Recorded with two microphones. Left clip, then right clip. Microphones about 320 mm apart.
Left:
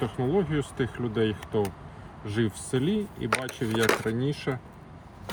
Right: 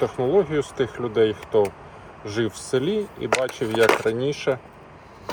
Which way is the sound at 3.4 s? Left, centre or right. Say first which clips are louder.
Right 7 dB; left.